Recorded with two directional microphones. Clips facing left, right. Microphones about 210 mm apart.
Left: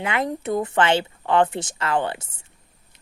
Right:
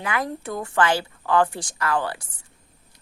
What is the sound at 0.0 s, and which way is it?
A woman's voice, 25° left (ahead or behind).